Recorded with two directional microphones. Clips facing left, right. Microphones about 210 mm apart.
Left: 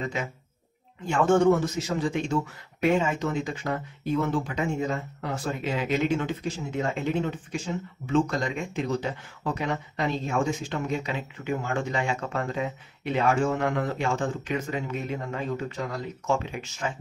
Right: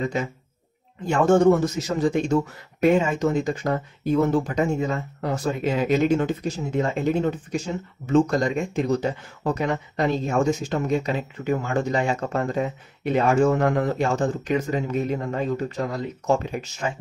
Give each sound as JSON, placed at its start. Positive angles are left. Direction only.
{"t": 1.0, "sound": "speech", "side_deg": -40}